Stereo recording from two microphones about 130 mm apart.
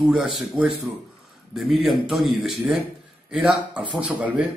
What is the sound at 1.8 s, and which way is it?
Speech, centre (ahead or behind).